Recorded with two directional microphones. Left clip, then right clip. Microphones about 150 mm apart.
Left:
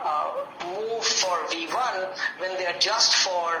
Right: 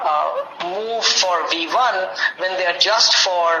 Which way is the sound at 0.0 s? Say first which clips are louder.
Right 7 dB; 30° right (ahead or behind).